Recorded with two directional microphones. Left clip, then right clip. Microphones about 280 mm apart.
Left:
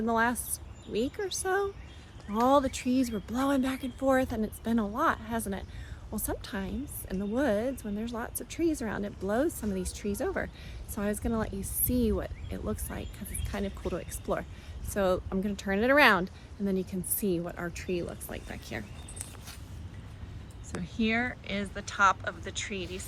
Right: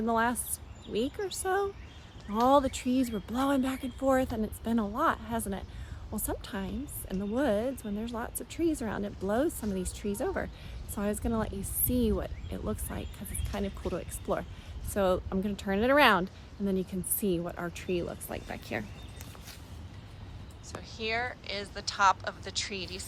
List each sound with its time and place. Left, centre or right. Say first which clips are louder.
0.0 s speech: left 1 dB; centre; by 18.9 s right
21.2 s speech: left 2 dB; centre
22.8 s speech: left 1 dB; right